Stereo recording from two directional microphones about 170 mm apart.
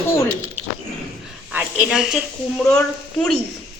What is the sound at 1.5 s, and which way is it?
A woman's voice, 5° right (ahead or behind).